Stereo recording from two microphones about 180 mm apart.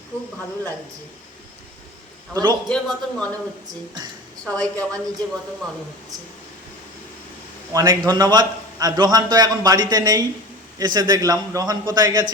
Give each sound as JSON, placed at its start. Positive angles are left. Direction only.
{"t": 2.3, "sound": "a man's voice", "side_deg": -25}
{"t": 2.6, "sound": "speech", "side_deg": 5}
{"t": 4.4, "sound": "speech", "side_deg": 5}
{"t": 7.7, "sound": "a man's voice", "side_deg": -20}